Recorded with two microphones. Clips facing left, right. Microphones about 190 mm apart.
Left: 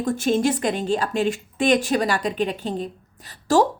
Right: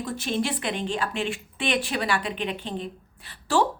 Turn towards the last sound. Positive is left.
turn(degrees=40)  # may be behind; listen again after turning